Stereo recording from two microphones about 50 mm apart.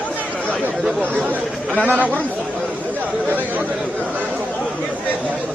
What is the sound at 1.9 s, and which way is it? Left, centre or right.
Speech, right.